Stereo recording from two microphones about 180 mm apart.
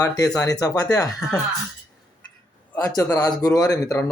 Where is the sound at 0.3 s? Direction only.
20° left (ahead or behind).